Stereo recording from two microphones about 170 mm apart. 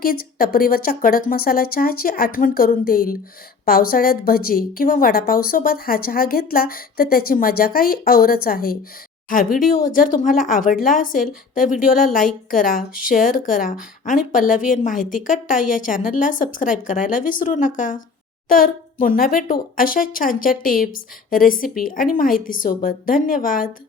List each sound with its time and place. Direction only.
0.0 s a woman's voice: 60° left (ahead or behind)